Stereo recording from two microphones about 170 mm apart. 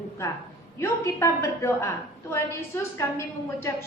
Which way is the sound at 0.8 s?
15° left (ahead or behind).